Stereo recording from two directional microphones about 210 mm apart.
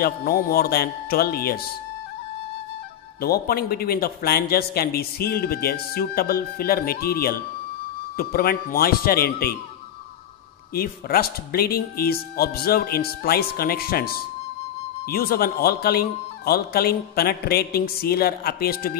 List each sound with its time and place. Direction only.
0.0 s a man's voice: 45° left (ahead or behind)
3.2 s a man's voice: 45° left (ahead or behind)
10.7 s a man's voice: 45° left (ahead or behind)